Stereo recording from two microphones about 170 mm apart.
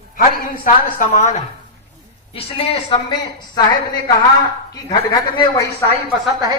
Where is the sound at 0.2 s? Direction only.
55° left (ahead or behind).